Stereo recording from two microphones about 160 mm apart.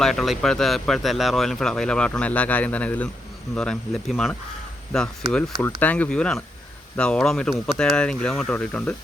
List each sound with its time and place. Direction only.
0.0 s speech: centre (ahead or behind)